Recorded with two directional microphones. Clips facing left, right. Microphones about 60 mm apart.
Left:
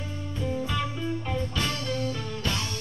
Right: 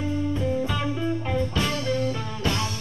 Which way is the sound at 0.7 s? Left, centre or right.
Right.